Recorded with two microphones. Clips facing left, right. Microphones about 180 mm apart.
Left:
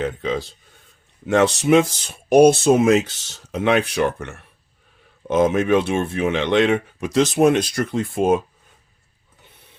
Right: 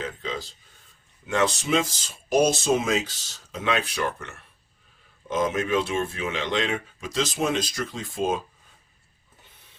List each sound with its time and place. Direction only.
0.0 s speech: 65° left (ahead or behind)